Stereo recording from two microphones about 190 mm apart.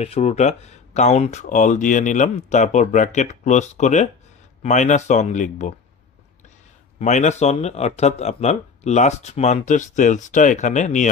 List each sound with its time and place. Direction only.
0.0 s speech: 35° left (ahead or behind)
7.0 s speech: 35° left (ahead or behind)